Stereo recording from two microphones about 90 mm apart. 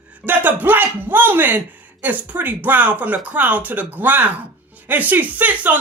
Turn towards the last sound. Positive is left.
turn(degrees=-20)  # may be behind; listen again after turning